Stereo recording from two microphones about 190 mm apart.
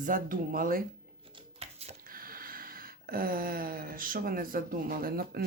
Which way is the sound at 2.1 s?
50° right (ahead or behind).